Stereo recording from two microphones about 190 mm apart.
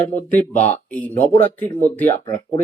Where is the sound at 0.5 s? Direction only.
35° left (ahead or behind).